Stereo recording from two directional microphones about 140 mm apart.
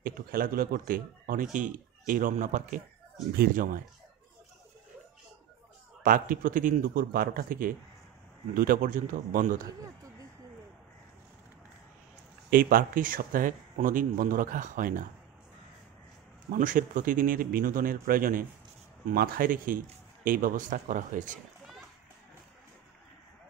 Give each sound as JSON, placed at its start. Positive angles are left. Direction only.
{"t": 0.0, "sound": "speech", "side_deg": -90}
{"t": 6.0, "sound": "a man's voice", "side_deg": -75}
{"t": 12.4, "sound": "speech", "side_deg": -90}
{"t": 16.5, "sound": "a man's voice", "side_deg": -70}